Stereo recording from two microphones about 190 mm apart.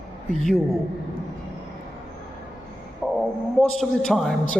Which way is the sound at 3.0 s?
Centre (ahead or behind).